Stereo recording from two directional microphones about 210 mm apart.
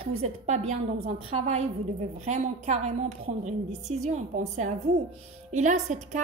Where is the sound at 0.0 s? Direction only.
30° right (ahead or behind).